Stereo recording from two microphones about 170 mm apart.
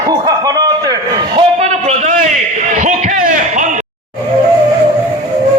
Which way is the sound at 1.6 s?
40° right (ahead or behind).